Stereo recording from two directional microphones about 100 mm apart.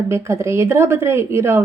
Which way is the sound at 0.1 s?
25° right (ahead or behind).